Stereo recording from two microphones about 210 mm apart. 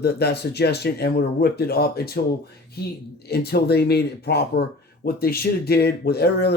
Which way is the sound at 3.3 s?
50° left (ahead or behind).